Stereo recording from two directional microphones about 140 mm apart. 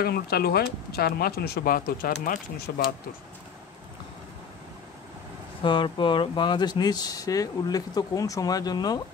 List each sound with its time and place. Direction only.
0.0 s speech: 90° left
5.6 s speech: 35° left (ahead or behind)